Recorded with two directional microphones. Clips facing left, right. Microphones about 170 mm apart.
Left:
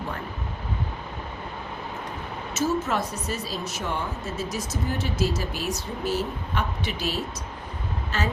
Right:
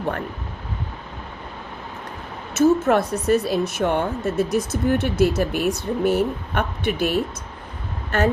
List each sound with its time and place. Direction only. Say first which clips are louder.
2.6 s speech: right 9 dB; 60° right (ahead or behind)